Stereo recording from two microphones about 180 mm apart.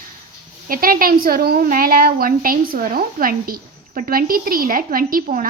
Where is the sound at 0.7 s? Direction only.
50° right (ahead or behind).